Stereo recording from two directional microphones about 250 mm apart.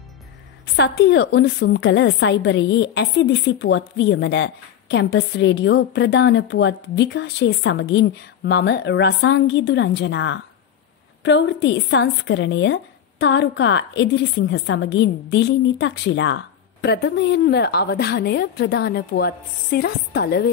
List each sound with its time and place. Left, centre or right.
0.7 s a woman's voice: left